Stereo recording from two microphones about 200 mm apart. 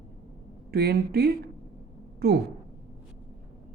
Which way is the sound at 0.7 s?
50° right (ahead or behind).